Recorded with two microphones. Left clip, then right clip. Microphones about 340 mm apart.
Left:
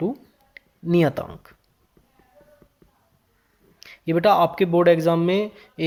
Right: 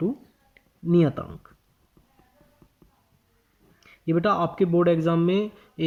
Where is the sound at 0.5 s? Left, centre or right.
Centre.